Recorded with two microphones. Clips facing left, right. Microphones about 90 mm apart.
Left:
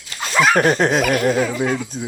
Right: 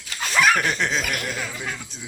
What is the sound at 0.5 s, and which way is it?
Dog, 40° left (ahead or behind).